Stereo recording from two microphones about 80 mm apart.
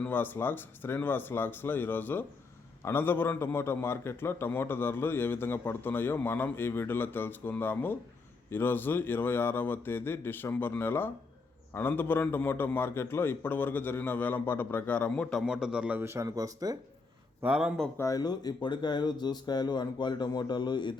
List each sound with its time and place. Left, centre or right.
0.1 s a man's voice: left
15.4 s a man's voice: centre
16.0 s a man's voice: right
16.2 s speech: right
17.4 s a man's voice: centre
17.9 s speech: left
18.2 s speech: left